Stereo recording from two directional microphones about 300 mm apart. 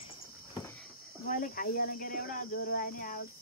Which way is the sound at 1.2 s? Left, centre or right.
Left.